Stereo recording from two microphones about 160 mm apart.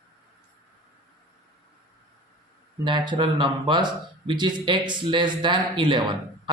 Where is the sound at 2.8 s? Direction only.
30° right (ahead or behind).